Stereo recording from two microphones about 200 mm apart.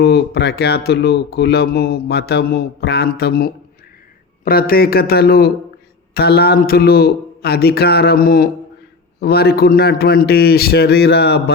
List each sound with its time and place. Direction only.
0.0 s speech: 55° left (ahead or behind)